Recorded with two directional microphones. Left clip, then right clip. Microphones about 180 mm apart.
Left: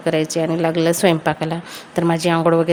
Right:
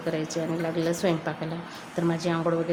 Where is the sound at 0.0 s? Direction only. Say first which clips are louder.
Left 10 dB; 45° left (ahead or behind).